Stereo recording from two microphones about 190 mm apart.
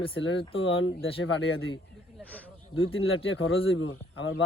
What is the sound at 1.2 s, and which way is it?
Speech, 75° left (ahead or behind).